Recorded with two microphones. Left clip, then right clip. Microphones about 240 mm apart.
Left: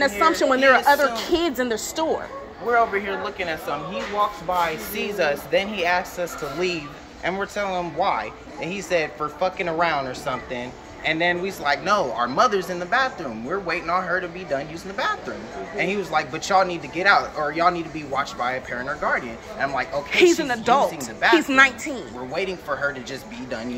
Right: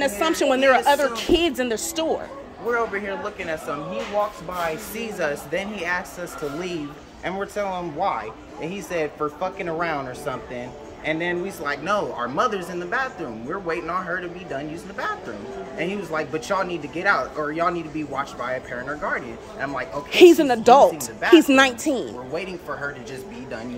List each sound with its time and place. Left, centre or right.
0.2 s speech: centre